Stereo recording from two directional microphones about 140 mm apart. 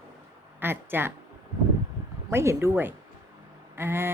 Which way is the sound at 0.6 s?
15° right (ahead or behind).